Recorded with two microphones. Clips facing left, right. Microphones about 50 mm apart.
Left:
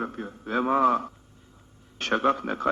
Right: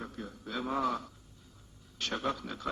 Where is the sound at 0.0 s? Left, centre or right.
Left.